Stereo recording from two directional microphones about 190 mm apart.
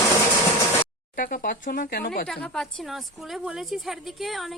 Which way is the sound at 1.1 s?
50° left (ahead or behind).